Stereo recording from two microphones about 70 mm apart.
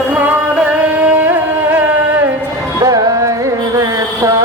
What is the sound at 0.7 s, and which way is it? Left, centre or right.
Carnatic music, right.